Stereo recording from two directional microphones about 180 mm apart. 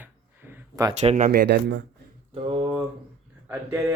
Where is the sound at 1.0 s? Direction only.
45° right (ahead or behind).